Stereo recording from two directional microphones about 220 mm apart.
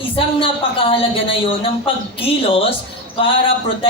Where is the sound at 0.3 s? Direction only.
25° left (ahead or behind).